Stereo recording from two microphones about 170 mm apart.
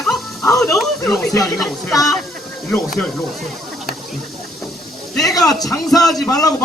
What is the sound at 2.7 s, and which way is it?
Speech, 5° left (ahead or behind).